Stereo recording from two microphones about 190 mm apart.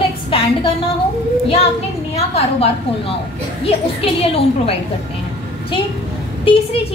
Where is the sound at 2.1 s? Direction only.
35° left (ahead or behind).